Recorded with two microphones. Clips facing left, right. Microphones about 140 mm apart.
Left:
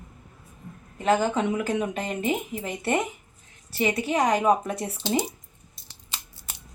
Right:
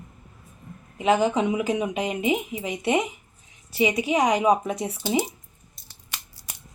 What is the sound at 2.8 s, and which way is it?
Speech, 15° right (ahead or behind).